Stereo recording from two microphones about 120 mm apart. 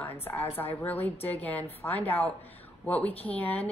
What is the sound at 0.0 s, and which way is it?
A woman's voice, 15° left (ahead or behind).